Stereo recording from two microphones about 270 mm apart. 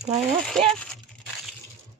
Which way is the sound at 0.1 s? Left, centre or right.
Centre.